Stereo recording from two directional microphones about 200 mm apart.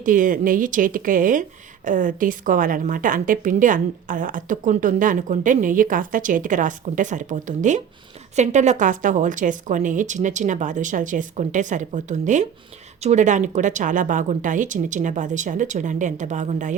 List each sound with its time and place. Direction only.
0.0 s speech: 40° right (ahead or behind)